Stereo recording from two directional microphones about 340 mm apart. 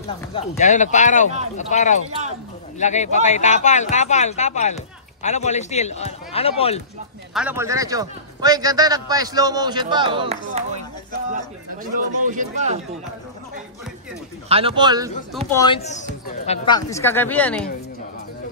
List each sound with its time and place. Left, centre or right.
0.3 s speech: centre
7.3 s a man's voice: centre
11.8 s speech: right
14.5 s a man's voice: centre
15.5 s speech: centre